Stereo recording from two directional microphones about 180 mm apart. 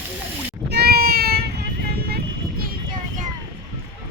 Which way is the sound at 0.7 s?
60° right (ahead or behind).